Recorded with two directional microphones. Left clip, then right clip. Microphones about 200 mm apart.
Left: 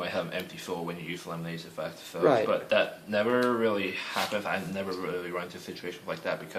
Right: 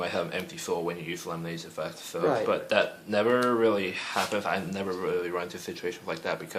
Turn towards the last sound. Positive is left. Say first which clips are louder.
# right 1 dB
turn(degrees=-45)  # may be behind; listen again after turning